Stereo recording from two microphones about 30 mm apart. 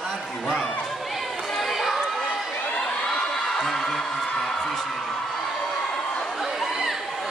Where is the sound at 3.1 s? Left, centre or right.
Centre.